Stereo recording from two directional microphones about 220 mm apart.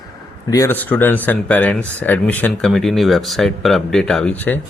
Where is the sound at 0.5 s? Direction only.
10° left (ahead or behind).